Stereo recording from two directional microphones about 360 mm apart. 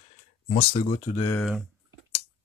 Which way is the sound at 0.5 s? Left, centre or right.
Centre.